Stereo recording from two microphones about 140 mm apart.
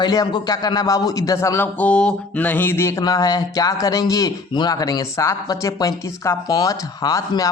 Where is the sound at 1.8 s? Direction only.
10° left (ahead or behind).